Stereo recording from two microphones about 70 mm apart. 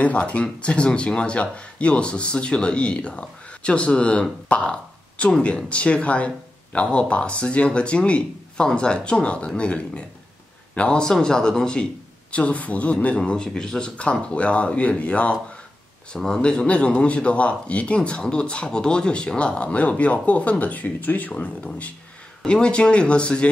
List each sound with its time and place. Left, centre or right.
0.0 s speech: centre